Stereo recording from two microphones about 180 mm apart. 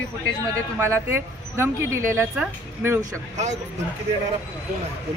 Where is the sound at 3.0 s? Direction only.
40° right (ahead or behind).